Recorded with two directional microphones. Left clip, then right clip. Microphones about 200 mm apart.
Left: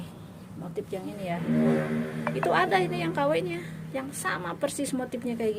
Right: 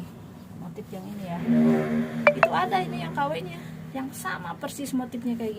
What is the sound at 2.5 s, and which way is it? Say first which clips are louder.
Speech: left 1 dB; 35° left (ahead or behind).